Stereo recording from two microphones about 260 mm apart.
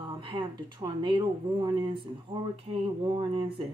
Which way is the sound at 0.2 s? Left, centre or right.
Centre.